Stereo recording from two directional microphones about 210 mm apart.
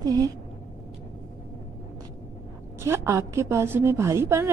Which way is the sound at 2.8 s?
15° right (ahead or behind).